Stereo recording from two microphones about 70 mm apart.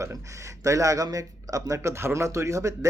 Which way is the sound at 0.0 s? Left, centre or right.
Right.